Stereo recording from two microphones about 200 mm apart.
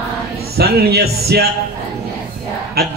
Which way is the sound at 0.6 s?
50° right (ahead or behind).